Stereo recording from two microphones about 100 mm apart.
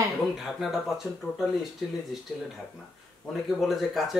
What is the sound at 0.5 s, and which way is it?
Speech, 5° right (ahead or behind).